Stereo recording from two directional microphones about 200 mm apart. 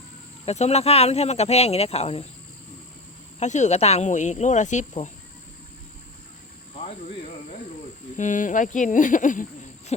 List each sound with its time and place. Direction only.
0.4 s speech: 35° left (ahead or behind)
3.4 s speech: 35° left (ahead or behind)
8.1 s speech: 40° left (ahead or behind)